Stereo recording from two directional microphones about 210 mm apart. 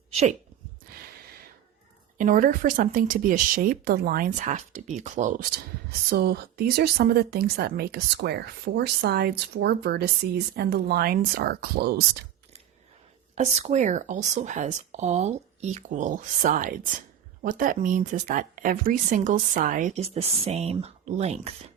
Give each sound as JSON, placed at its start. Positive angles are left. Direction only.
{"t": 0.1, "sound": "speech", "side_deg": -30}
{"t": 2.1, "sound": "speech", "side_deg": -40}
{"t": 6.1, "sound": "a woman's voice", "side_deg": -50}
{"t": 13.3, "sound": "speech", "side_deg": -35}